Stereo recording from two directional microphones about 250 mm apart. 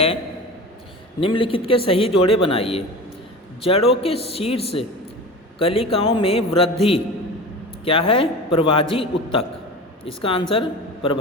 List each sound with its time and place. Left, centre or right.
1.2 s a man's voice: left